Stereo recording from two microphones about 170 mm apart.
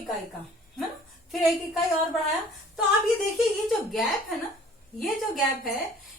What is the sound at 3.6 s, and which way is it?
Speech, centre (ahead or behind).